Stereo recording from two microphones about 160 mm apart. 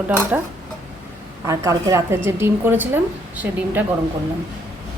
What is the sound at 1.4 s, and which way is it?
A woman's voice, 20° right (ahead or behind).